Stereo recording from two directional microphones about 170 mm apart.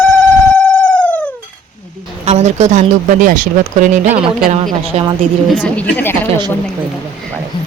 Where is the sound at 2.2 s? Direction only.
40° right (ahead or behind).